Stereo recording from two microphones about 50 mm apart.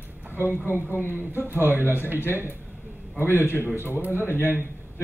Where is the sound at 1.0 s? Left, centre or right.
Left.